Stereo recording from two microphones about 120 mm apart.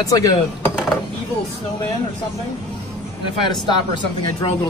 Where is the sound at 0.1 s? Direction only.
30° left (ahead or behind).